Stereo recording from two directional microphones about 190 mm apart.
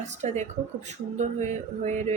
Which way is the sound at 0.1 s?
40° right (ahead or behind).